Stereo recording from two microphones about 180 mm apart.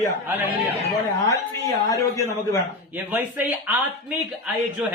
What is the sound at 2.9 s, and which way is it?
Speech, 10° right (ahead or behind).